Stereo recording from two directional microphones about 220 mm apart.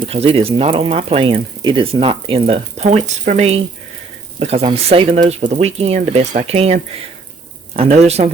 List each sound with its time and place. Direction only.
0.0 s speech: 25° right (ahead or behind)